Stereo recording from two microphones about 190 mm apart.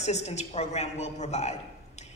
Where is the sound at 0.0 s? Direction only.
35° left (ahead or behind).